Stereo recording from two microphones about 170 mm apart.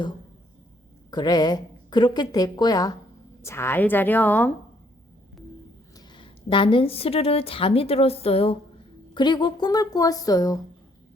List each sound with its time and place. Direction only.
1.1 s a woman's voice: 25° left (ahead or behind)
6.0 s a woman's voice: 30° left (ahead or behind)